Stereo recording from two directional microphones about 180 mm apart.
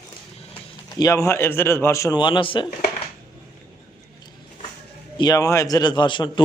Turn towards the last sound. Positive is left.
turn(degrees=25)  # may be behind; listen again after turning